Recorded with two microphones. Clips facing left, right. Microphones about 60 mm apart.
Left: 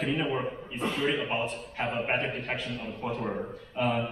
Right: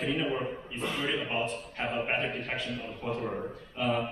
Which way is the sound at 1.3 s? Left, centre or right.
Centre.